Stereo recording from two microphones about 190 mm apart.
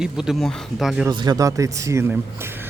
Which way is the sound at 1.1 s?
20° right (ahead or behind).